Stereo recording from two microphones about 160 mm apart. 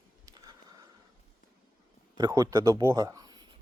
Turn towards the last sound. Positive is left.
turn(degrees=-25)  # may be behind; listen again after turning